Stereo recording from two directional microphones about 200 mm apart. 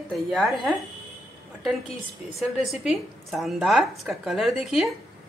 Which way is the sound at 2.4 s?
Centre (ahead or behind).